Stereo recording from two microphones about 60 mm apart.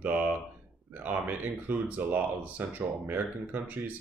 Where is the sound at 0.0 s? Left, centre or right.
Right.